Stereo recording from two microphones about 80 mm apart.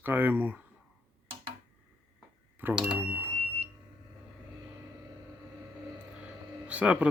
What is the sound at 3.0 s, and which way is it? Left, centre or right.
Speech, right.